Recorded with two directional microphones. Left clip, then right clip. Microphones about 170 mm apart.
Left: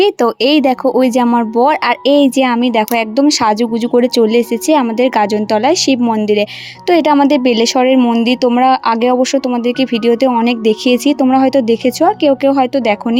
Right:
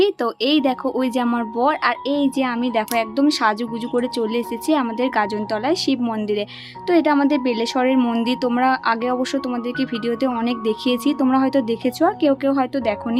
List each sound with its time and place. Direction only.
0.0 s speech: 40° left (ahead or behind)
6.9 s speech: 40° left (ahead or behind)